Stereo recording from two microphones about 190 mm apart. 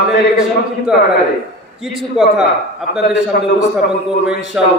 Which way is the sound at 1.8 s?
Centre (ahead or behind).